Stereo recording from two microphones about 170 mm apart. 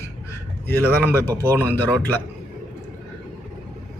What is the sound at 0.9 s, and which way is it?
Speech, 20° right (ahead or behind).